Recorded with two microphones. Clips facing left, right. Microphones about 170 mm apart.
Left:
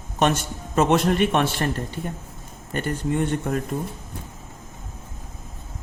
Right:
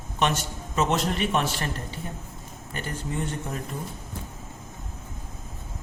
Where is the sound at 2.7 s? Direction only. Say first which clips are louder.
Left 8 dB; 60° left (ahead or behind).